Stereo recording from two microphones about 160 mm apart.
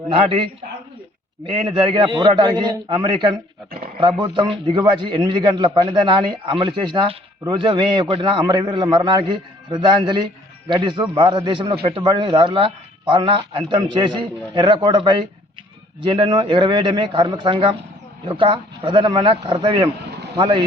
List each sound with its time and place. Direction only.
0.1 s a man's voice: 35° right (ahead or behind)